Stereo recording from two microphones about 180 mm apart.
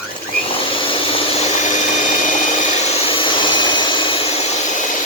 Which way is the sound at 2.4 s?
45° left (ahead or behind).